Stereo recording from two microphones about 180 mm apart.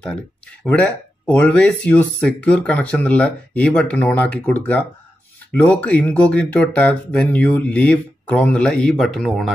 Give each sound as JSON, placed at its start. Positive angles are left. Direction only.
{"t": 0.7, "sound": "speech", "side_deg": 5}